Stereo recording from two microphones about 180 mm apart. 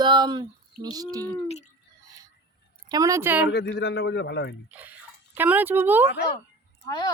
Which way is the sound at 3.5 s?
65° left (ahead or behind).